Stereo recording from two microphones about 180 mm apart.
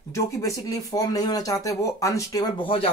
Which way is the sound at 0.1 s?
20° left (ahead or behind).